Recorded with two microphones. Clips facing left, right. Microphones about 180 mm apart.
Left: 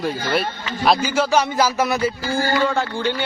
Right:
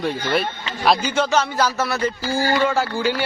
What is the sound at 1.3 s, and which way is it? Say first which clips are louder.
Speech: left 2 dB; 10° left (ahead or behind).